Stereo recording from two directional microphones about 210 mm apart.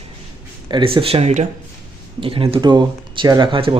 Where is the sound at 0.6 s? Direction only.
25° right (ahead or behind).